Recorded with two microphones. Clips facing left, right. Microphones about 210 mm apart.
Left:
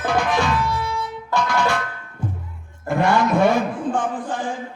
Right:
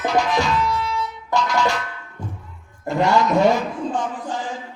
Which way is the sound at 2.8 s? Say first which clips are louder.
Even; 55° left (ahead or behind).